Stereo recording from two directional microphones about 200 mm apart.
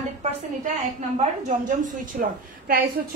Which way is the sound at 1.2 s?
40° right (ahead or behind).